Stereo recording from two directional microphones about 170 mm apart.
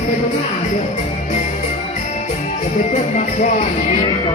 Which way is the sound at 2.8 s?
45° left (ahead or behind).